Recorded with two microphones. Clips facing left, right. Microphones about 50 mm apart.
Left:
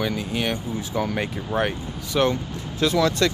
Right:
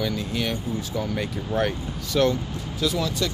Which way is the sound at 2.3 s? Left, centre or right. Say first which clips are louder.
Even; left.